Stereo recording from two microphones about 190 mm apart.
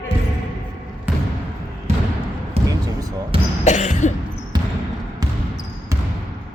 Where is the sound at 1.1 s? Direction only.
5° right (ahead or behind).